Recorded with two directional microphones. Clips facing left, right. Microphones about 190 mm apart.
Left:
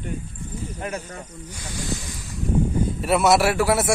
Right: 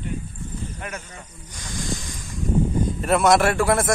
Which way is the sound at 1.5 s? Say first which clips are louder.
Even; 10° left (ahead or behind).